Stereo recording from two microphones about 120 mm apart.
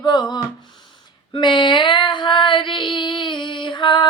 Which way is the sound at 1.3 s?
40° left (ahead or behind).